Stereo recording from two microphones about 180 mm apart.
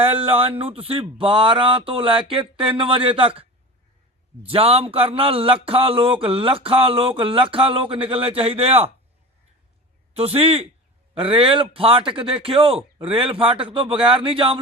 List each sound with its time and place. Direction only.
0.0 s speech: 30° right (ahead or behind)
4.4 s speech: 35° right (ahead or behind)
10.2 s speech: 35° right (ahead or behind)